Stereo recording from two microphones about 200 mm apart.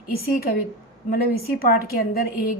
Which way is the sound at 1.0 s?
50° left (ahead or behind).